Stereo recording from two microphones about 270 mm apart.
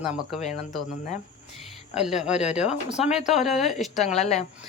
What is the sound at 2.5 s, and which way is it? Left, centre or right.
Speech, left.